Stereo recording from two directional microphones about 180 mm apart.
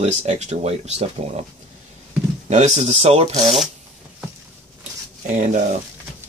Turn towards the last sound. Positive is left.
turn(degrees=-45)  # may be behind; listen again after turning